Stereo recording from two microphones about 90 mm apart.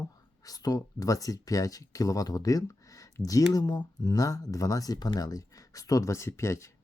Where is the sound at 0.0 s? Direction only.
45° left (ahead or behind).